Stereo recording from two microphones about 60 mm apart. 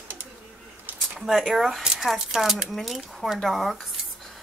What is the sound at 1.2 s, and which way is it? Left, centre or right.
Speech, centre.